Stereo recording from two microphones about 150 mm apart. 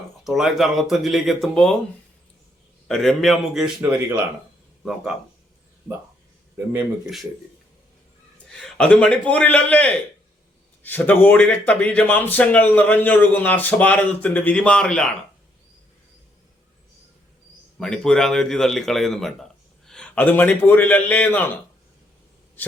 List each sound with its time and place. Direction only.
0.3 s a man's voice: centre (ahead or behind)
2.8 s a man's voice: centre (ahead or behind)
3.8 s speech: 15° right (ahead or behind)
8.5 s speech: 10° left (ahead or behind)
17.7 s a man's voice: 5° left (ahead or behind)